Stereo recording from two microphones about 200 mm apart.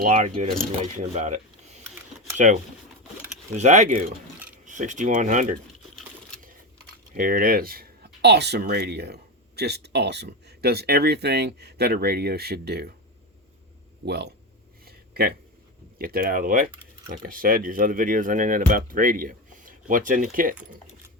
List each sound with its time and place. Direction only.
0.0 s speech: 35° right (ahead or behind)
3.5 s speech: 35° right (ahead or behind)
7.1 s speech: 45° right (ahead or behind)
14.0 s speech: 55° right (ahead or behind)
14.8 s a sound: 50° right (ahead or behind)
16.0 s speech: 45° right (ahead or behind)